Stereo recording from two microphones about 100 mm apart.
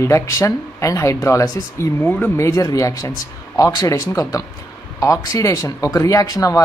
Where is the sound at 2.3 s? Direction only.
30° left (ahead or behind).